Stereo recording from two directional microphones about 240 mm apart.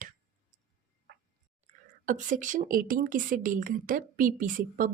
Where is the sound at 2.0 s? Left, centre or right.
Right.